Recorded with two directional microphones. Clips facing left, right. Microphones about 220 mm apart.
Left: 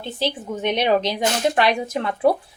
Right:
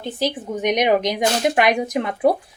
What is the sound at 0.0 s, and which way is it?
Speech, 15° right (ahead or behind).